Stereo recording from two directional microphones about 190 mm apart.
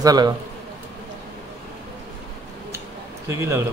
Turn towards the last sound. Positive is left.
turn(degrees=-15)  # may be behind; listen again after turning